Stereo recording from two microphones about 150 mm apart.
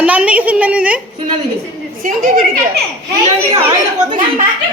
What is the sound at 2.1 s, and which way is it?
Speech, 70° right (ahead or behind).